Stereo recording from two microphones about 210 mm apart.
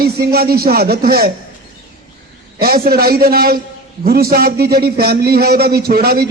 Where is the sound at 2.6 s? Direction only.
45° right (ahead or behind).